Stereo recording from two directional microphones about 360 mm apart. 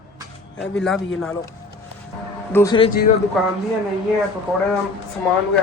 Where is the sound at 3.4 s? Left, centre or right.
Centre.